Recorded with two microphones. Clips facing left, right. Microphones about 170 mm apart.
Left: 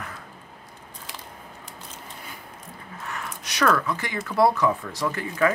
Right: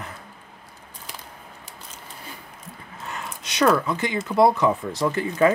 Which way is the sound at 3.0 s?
25° right (ahead or behind).